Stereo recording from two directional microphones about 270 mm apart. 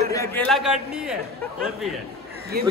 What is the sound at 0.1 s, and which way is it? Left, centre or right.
Speech, centre.